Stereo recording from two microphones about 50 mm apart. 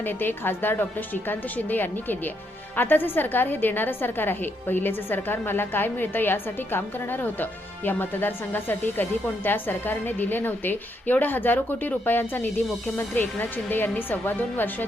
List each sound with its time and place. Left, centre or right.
0.0 s a woman's voice: left